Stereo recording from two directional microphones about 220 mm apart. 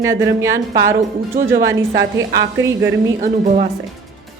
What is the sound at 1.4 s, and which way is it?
Speech, 40° right (ahead or behind).